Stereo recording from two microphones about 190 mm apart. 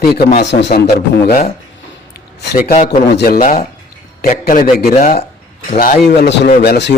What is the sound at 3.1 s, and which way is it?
A man's voice, 60° left (ahead or behind).